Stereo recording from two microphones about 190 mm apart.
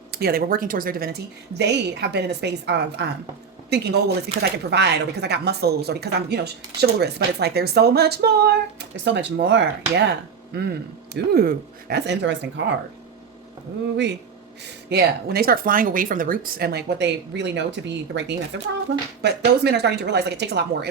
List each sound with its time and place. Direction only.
0.1 s speech: 55° right (ahead or behind)
1.5 s speech: 60° right (ahead or behind)
13.9 s speech: 65° right (ahead or behind)